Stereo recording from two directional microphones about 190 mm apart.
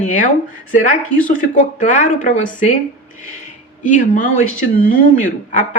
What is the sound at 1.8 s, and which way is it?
Speech, 40° left (ahead or behind).